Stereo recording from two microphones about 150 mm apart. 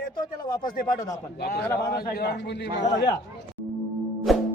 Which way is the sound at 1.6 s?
20° left (ahead or behind).